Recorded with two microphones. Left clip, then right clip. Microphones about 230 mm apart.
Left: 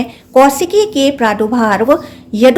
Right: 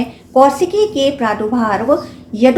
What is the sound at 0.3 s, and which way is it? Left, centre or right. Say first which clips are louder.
A woman's voice: left 2 dB; left.